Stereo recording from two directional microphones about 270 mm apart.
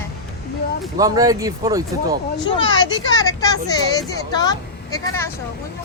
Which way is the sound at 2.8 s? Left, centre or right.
Centre.